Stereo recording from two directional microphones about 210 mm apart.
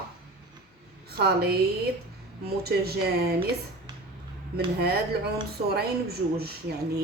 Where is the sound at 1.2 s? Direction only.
45° right (ahead or behind).